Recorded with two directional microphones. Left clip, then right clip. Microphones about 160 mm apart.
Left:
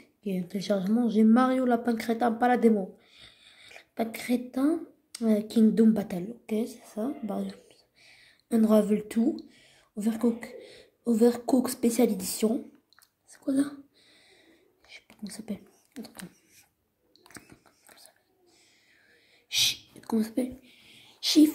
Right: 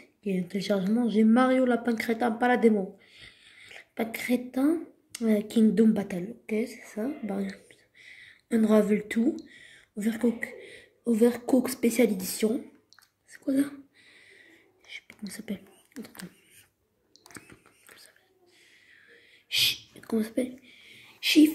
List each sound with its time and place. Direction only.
0.2 s a woman's voice: 10° left (ahead or behind)
6.0 s speech: 20° left (ahead or behind)
13.3 s a sound: 10° left (ahead or behind)
14.9 s whispering: 10° left (ahead or behind)